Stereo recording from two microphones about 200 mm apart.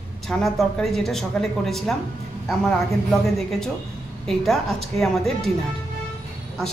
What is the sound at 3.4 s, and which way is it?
Speech, centre (ahead or behind).